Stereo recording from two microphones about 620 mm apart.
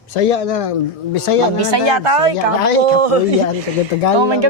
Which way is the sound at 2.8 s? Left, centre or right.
Right.